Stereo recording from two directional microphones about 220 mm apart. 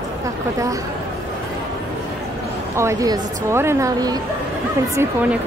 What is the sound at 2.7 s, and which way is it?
A woman's voice, 15° right (ahead or behind).